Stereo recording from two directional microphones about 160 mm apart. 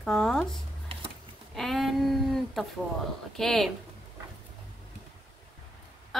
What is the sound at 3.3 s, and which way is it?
Speech, centre (ahead or behind).